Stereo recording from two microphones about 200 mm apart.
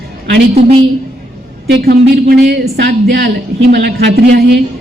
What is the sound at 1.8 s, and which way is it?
Speech, 55° right (ahead or behind).